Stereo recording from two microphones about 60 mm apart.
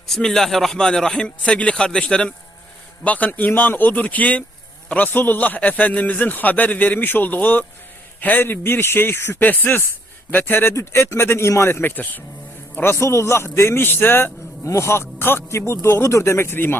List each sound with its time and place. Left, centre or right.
0.1 s a man's voice: centre
3.0 s a man's voice: left
9.4 s a man's voice: left
10.8 s a man's voice: left
11.8 s a man's voice: left
12.7 s a man's voice: left
14.6 s a man's voice: left
15.4 s a man's voice: left